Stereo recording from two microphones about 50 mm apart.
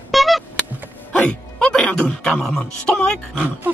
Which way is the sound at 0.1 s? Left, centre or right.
Centre.